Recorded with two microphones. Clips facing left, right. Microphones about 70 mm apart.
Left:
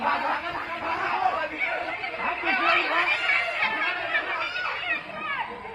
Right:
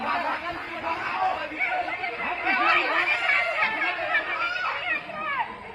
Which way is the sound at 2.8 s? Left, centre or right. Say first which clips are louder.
Even; right.